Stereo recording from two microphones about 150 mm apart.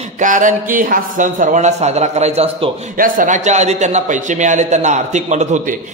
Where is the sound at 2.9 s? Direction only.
65° right (ahead or behind).